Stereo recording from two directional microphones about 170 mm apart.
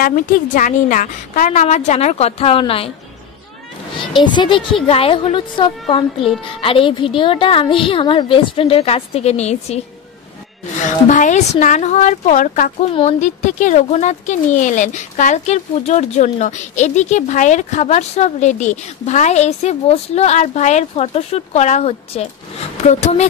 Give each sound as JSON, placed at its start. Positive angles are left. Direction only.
{"t": 0.0, "sound": "a woman's voice", "side_deg": 55}
{"t": 4.2, "sound": "a woman's voice", "side_deg": 30}
{"t": 10.8, "sound": "speech", "side_deg": 45}
{"t": 12.9, "sound": "a woman's voice", "side_deg": 40}